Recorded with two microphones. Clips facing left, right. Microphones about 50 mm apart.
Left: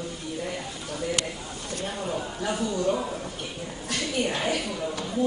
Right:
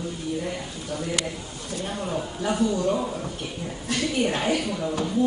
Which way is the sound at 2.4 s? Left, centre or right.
Centre.